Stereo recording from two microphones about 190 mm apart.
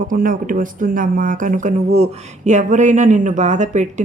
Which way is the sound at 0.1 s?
45° right (ahead or behind).